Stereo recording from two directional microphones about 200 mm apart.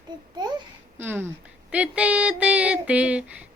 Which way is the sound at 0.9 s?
10° right (ahead or behind).